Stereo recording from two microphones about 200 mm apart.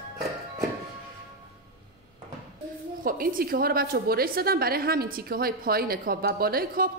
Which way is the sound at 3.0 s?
45° right (ahead or behind).